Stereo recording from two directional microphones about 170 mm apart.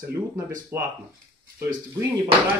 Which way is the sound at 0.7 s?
15° right (ahead or behind).